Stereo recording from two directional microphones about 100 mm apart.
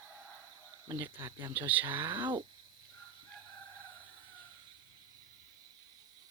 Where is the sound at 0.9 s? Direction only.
35° right (ahead or behind).